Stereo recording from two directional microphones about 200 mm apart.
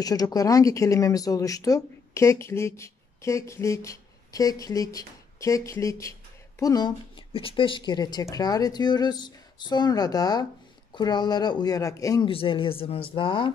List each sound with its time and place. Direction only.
0.0 s speech: 20° left (ahead or behind)
12.3 s speech: 25° left (ahead or behind)